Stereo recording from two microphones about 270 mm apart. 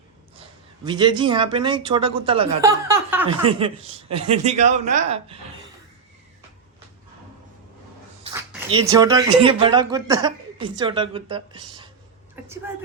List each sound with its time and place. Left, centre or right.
0.9 s speech: centre
3.2 s speech: centre
8.2 s speech: centre